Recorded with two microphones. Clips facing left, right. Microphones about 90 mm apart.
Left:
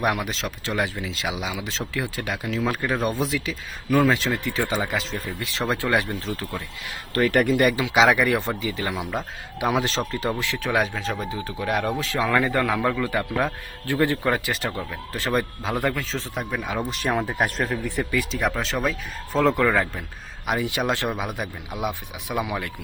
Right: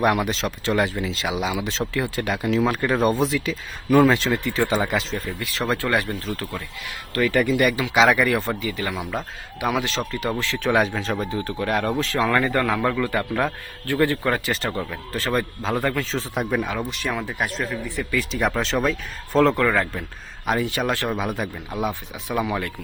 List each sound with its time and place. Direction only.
0.0 s speech: centre (ahead or behind)
5.4 s speech: 20° left (ahead or behind)
7.3 s speech: 55° left (ahead or behind)
7.6 s speech: 25° left (ahead or behind)
9.7 s speech: 35° left (ahead or behind)
10.6 s speech: centre (ahead or behind)
13.0 s speech: 15° left (ahead or behind)
16.3 s speech: 10° right (ahead or behind)
16.9 s speech: 40° left (ahead or behind)
18.2 s speech: centre (ahead or behind); by 21.2 s 20° left (ahead or behind)
21.2 s speech: 5° left (ahead or behind)